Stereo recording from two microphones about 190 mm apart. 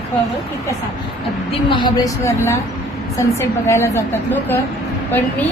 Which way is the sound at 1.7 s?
25° left (ahead or behind).